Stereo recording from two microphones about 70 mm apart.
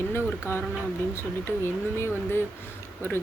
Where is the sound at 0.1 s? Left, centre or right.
Left.